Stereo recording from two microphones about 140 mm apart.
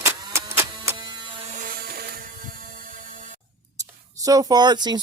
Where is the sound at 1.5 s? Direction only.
80° right.